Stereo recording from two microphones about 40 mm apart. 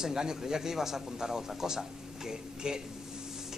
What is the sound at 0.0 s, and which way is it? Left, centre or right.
Speech, centre.